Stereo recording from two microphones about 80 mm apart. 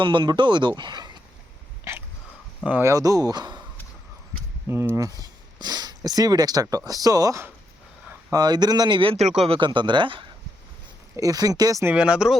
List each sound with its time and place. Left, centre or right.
0.0 s speech: right
0.7 s speech: right
1.8 s a sound: right
2.8 s speech: right
4.7 s speech: right
5.2 s speech: right
11.2 s speech: right
11.9 s speech: centre